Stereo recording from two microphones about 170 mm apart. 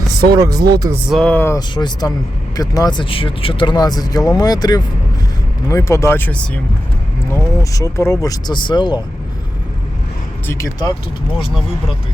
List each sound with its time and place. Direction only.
0.3 s speech: 20° right (ahead or behind)
1.1 s speech: 5° left (ahead or behind)
1.5 s speech: 25° left (ahead or behind)
10.4 s speech: 15° left (ahead or behind)